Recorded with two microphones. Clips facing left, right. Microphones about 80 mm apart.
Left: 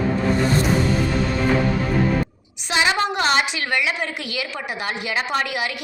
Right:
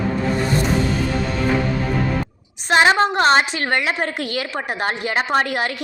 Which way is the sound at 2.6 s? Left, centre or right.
Right.